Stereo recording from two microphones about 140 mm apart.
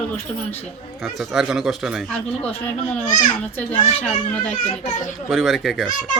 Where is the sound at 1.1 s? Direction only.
5° right (ahead or behind).